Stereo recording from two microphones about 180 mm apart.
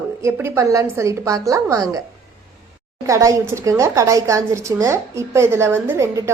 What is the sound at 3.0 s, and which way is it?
Speech, 15° right (ahead or behind).